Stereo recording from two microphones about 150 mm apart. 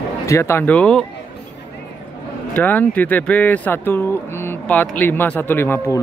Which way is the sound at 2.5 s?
10° left (ahead or behind).